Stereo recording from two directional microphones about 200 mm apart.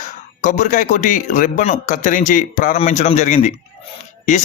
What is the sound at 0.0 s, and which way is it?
Speech, 40° left (ahead or behind).